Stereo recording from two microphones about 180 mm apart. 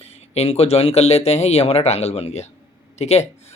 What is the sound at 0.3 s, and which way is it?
Speech, 35° left (ahead or behind).